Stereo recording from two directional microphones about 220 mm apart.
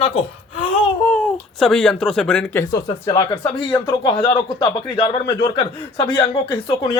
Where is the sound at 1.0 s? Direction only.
5° left (ahead or behind).